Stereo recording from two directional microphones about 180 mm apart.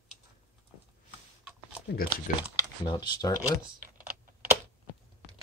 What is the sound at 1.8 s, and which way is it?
Speech, 60° left (ahead or behind).